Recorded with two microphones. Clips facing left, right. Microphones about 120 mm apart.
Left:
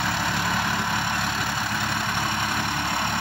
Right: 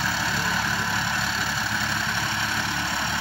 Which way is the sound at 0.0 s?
55° left (ahead or behind).